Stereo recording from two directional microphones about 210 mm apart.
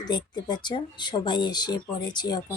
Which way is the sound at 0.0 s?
20° left (ahead or behind).